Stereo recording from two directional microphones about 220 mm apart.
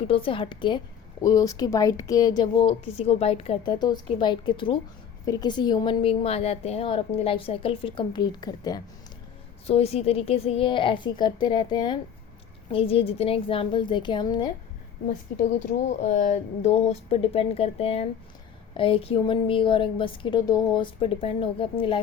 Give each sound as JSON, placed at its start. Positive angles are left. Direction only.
{"t": 0.1, "sound": "a woman's voice", "side_deg": 25}
{"t": 15.4, "sound": "a woman's voice", "side_deg": 35}